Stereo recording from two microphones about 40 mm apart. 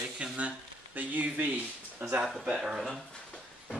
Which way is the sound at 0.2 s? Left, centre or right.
Right.